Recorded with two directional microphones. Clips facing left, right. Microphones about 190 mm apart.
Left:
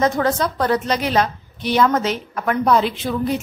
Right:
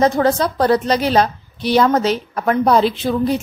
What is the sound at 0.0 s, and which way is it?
A woman's voice, 30° right (ahead or behind).